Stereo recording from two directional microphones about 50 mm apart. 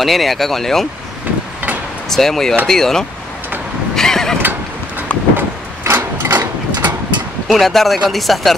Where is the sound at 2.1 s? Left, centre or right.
Centre.